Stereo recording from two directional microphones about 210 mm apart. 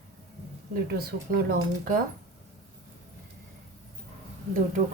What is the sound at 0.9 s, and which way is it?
Speech, 45° right (ahead or behind).